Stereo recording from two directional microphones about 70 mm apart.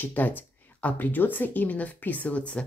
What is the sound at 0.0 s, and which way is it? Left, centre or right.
Speech, left.